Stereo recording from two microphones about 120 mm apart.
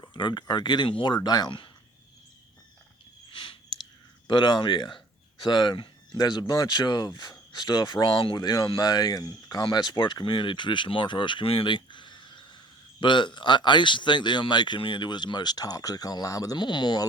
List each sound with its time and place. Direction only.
0.0 s speech: 40° left (ahead or behind)
3.2 s a sound: 45° left (ahead or behind)
4.3 s speech: 40° left (ahead or behind)